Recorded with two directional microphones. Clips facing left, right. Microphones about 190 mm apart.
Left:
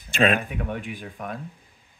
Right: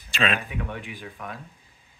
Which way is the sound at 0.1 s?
50° left (ahead or behind).